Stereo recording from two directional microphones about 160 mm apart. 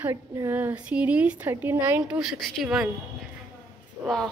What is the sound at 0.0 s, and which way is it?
A woman's voice, 15° right (ahead or behind).